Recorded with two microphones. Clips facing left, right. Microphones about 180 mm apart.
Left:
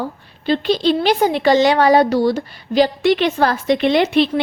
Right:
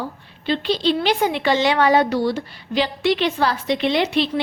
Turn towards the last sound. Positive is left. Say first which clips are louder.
# left 5 dB
turn(degrees=55)  # may be behind; listen again after turning